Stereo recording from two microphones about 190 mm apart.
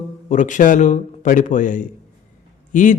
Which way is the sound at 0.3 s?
40° left (ahead or behind).